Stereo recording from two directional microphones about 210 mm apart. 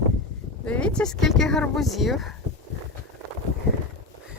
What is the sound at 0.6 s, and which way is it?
Speech, 5° left (ahead or behind).